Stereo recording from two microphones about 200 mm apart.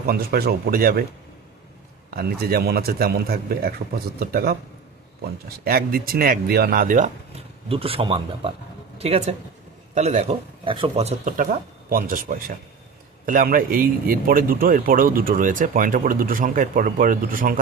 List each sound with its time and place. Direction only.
0.1 s a man's voice: 50° right (ahead or behind)
2.0 s a man's voice: 50° right (ahead or behind)
5.6 s a man's voice: 45° right (ahead or behind)